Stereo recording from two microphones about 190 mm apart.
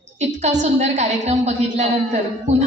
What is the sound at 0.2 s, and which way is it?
A man's voice, 40° right (ahead or behind).